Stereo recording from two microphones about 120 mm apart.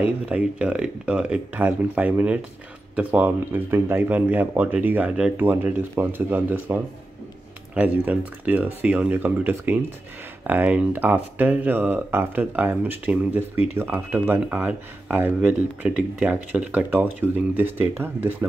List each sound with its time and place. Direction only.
0.3 s speech: 10° right (ahead or behind)